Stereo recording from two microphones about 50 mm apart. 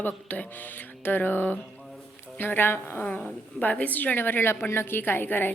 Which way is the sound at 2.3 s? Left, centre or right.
Left.